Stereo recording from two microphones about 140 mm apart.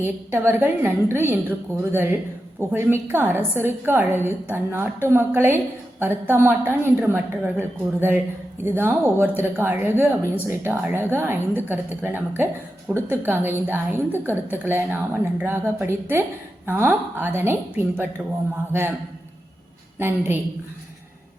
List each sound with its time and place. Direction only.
0.0 s a woman's voice: 15° right (ahead or behind)
20.0 s a woman's voice: 15° right (ahead or behind)